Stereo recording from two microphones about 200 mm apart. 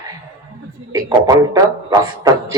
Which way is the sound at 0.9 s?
20° right (ahead or behind).